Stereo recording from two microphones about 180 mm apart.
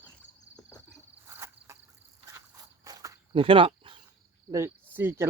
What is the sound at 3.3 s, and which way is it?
Cricket, 30° right (ahead or behind).